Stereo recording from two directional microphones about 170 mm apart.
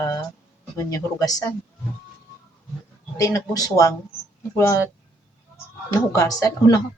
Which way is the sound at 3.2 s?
20° left (ahead or behind).